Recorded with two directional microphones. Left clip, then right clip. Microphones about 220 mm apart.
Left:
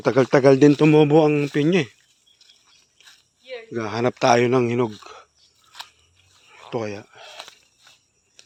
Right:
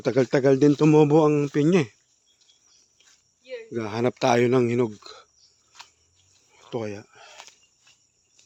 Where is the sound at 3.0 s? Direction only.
25° right (ahead or behind).